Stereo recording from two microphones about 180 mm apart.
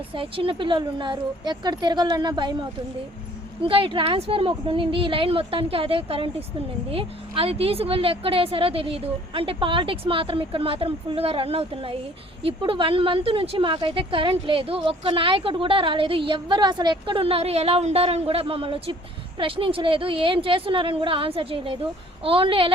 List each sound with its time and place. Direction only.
0.1 s a woman's voice: 30° right (ahead or behind)
3.6 s a woman's voice: 30° right (ahead or behind)